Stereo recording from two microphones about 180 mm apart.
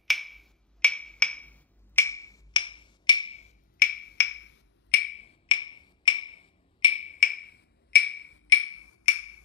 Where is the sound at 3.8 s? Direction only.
55° left (ahead or behind); by 5.1 s 75° left (ahead or behind).